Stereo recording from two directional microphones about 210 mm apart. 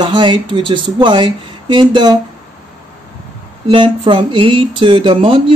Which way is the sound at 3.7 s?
20° right (ahead or behind).